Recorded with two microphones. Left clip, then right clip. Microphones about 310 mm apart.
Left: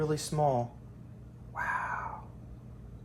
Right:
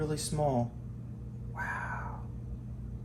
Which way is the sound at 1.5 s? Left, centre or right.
Left.